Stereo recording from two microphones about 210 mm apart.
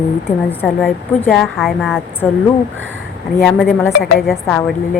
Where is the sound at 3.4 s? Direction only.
Centre (ahead or behind).